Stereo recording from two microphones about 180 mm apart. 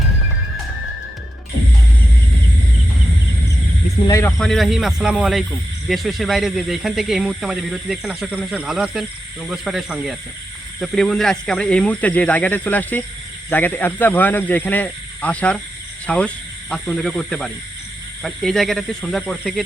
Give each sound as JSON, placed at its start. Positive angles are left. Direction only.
{"t": 4.0, "sound": "speech", "side_deg": 20}
{"t": 4.4, "sound": "speech", "side_deg": 0}